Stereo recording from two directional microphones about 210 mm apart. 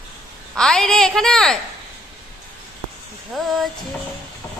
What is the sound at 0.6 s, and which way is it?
A woman's voice, 5° left (ahead or behind).